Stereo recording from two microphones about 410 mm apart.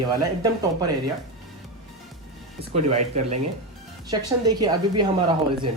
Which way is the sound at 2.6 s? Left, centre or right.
Centre.